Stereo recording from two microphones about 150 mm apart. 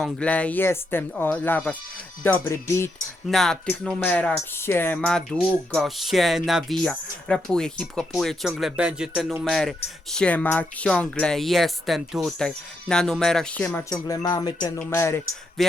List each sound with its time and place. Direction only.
0.0 s speech: 10° left (ahead or behind)
3.2 s speech: centre (ahead or behind)
13.9 s speech: 25° left (ahead or behind)
14.8 s speech: 15° left (ahead or behind)